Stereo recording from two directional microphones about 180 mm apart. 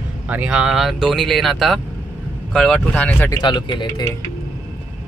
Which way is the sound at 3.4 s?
25° left (ahead or behind).